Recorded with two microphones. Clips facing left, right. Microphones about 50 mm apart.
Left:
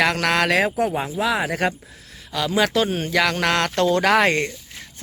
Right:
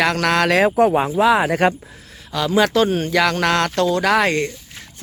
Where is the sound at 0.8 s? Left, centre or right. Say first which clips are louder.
Right 7 dB; right.